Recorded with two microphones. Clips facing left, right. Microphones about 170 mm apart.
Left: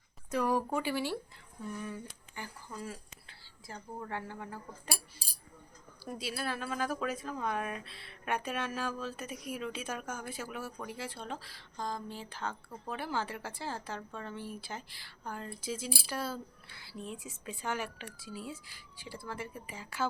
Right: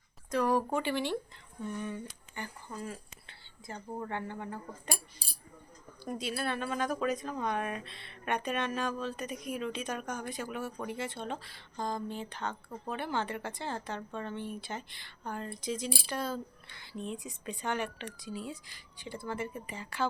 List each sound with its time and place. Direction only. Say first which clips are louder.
0.3 s a sound: right 2 dB; 10° left (ahead or behind)
0.8 s speech: right 2 dB; 5° left (ahead or behind)
6.1 s speech: right 3 dB; 5° left (ahead or behind)